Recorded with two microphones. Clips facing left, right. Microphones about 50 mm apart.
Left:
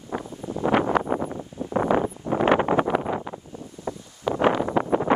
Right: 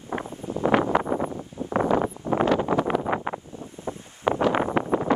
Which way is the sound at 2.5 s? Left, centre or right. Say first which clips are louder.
Left 5 dB; left.